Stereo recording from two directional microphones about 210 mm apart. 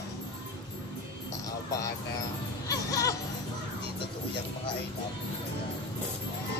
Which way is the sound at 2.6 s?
15° left (ahead or behind).